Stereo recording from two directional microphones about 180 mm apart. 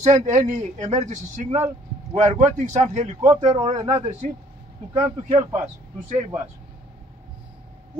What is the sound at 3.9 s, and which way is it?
Speech, 35° right (ahead or behind).